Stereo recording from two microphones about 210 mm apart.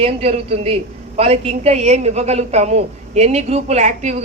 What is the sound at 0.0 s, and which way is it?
A woman's voice, 30° right (ahead or behind).